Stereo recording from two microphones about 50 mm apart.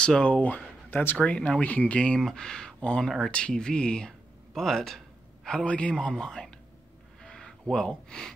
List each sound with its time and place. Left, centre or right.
0.0 s speech: centre
0.8 s speech: left
1.2 s speech: left
2.3 s speech: centre
4.6 s a sound: centre
5.7 s speech: left
7.2 s a sound: centre